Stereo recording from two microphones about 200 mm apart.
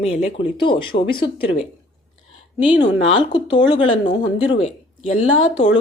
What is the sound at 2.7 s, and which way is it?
A woman's voice, 25° left (ahead or behind).